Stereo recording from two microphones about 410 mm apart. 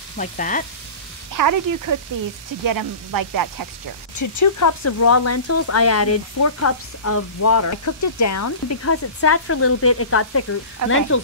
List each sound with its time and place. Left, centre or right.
0.2 s frying: centre
1.3 s speech: right
4.2 s speech: left
10.9 s frying: left